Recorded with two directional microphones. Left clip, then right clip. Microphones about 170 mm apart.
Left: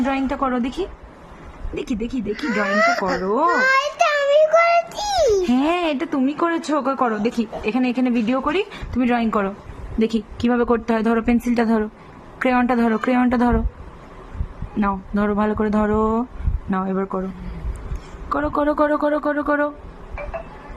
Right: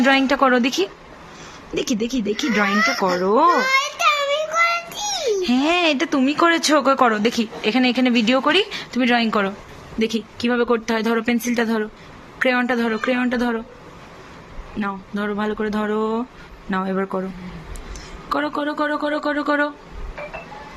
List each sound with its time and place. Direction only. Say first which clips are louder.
0.0 s a woman's voice: right 6 dB; 15° right (ahead or behind)
2.7 s speech: left 2 dB; 45° left (ahead or behind)
3.7 s child singing: left 1 dB; 50° left (ahead or behind)
5.5 s speech: right 2 dB; 5° left (ahead or behind)
10.0 s a woman's voice: left 1 dB; 20° left (ahead or behind)
14.8 s a woman's voice: left 4 dB; 25° left (ahead or behind); by 17.2 s 5° left (ahead or behind)
18.3 s a woman's voice: even; 15° left (ahead or behind)
18.5 s a woman's voice: left 4 dB; 30° left (ahead or behind)
19.0 s speech: left 1 dB; 15° left (ahead or behind)